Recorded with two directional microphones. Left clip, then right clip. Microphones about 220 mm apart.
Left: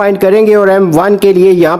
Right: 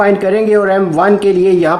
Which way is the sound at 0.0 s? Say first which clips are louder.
Left 4 dB; 50° left (ahead or behind).